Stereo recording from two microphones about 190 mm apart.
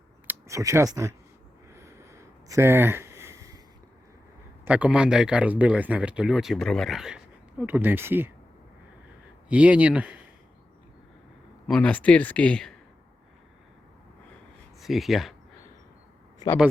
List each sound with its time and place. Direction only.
0.3 s speech: 15° right (ahead or behind)
1.7 s a sound: 15° right (ahead or behind)
4.6 s speech: 5° right (ahead or behind)
9.5 s speech: 5° right (ahead or behind)
11.7 s speech: 5° left (ahead or behind)
14.8 s speech: centre (ahead or behind)